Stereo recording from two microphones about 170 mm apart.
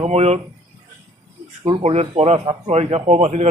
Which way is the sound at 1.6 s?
35° right (ahead or behind).